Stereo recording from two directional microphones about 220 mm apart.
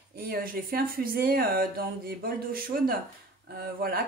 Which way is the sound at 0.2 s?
40° right (ahead or behind).